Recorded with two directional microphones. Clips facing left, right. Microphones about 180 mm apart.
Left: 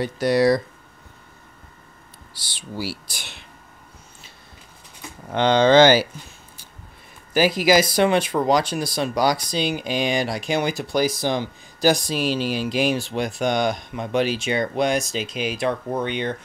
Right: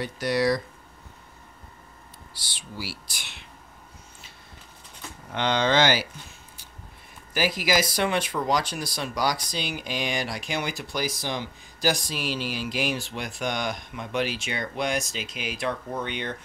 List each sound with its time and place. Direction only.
0.0 s speech: 30° left (ahead or behind)
5.3 s speech: 35° left (ahead or behind)
7.3 s speech: 25° left (ahead or behind)